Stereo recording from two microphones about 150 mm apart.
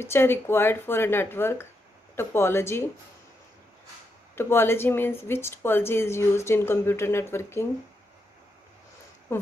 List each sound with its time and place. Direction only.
0.0 s a woman's voice: 15° left (ahead or behind)
4.4 s a woman's voice: 15° left (ahead or behind)
9.3 s speech: 15° left (ahead or behind)